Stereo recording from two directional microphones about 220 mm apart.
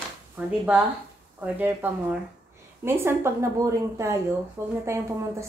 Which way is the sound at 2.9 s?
10° right (ahead or behind).